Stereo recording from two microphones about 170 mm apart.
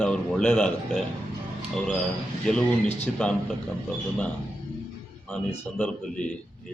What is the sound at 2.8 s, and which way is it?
Speech, 40° left (ahead or behind).